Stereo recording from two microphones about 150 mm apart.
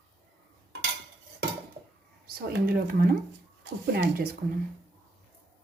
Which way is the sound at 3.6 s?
90° right.